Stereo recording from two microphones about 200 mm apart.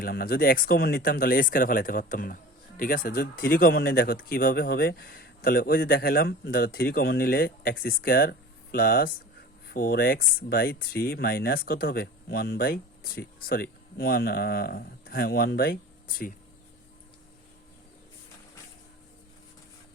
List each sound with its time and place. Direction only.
0.0 s speech: 50° left (ahead or behind)